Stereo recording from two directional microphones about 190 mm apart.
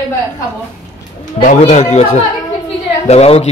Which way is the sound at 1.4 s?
35° left (ahead or behind).